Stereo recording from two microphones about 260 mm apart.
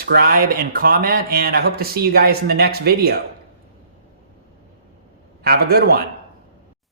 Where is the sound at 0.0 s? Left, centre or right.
Right.